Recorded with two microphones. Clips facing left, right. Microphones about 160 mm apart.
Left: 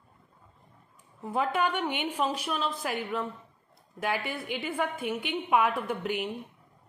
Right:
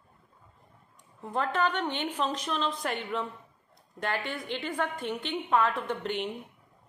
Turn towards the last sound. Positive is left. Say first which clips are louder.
# left 1 dB
turn(degrees=10)  # may be behind; listen again after turning